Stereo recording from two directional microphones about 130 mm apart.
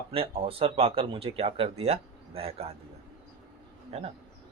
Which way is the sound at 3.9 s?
55° right (ahead or behind).